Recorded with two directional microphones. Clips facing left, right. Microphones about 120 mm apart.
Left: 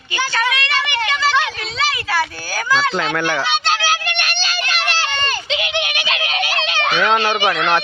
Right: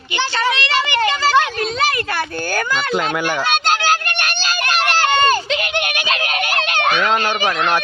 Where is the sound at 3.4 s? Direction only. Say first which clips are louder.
Right 2 dB; 45° right (ahead or behind).